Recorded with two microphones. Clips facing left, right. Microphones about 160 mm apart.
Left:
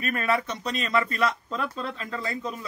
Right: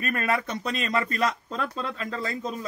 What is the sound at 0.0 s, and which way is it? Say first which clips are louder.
A man's voice: left 1 dB; 50° right (ahead or behind).